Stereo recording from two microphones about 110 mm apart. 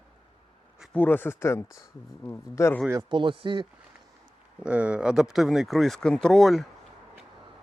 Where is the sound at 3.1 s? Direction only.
45° right (ahead or behind).